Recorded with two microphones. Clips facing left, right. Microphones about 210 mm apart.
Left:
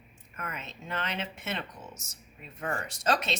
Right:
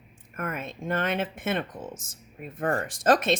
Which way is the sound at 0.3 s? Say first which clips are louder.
Right 8 dB; 50° right (ahead or behind).